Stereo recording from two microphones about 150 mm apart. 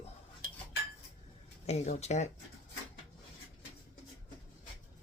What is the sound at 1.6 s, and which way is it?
Speech, 45° left (ahead or behind).